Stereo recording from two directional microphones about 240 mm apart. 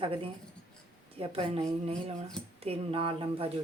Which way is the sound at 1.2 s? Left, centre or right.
Right.